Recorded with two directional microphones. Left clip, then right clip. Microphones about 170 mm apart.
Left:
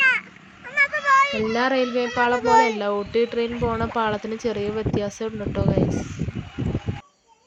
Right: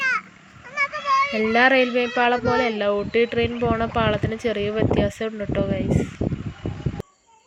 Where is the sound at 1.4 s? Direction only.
10° right (ahead or behind).